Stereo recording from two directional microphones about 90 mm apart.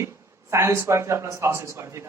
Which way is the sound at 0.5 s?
30° right (ahead or behind).